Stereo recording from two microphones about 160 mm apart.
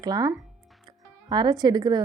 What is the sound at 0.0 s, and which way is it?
A woman's voice, 25° right (ahead or behind).